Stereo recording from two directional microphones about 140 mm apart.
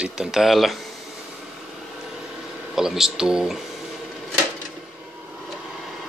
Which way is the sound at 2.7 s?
5° right (ahead or behind).